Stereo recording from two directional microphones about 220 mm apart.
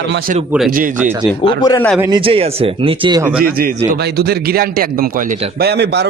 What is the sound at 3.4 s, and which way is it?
A man's voice, 40° right (ahead or behind).